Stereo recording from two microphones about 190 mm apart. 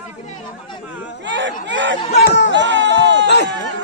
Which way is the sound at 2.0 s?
35° left (ahead or behind).